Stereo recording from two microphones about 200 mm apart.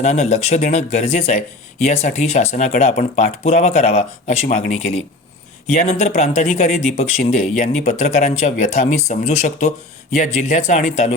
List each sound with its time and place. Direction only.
0.0 s speech: 35° left (ahead or behind)